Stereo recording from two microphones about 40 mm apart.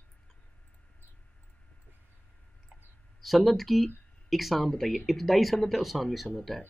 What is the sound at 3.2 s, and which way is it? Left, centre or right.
Speech, centre.